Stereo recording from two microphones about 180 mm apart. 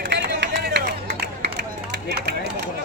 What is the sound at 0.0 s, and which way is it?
Run, 75° right (ahead or behind).